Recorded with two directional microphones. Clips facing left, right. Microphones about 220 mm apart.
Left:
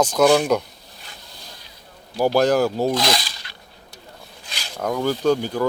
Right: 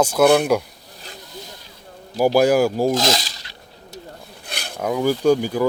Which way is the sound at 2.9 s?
45° right (ahead or behind).